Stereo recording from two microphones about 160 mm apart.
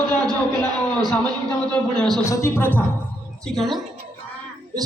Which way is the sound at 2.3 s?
15° left (ahead or behind).